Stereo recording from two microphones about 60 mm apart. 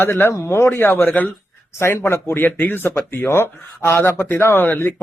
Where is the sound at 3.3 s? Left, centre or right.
Left.